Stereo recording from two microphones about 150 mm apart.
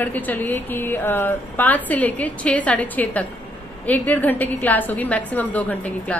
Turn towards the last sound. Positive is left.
turn(degrees=10)  # may be behind; listen again after turning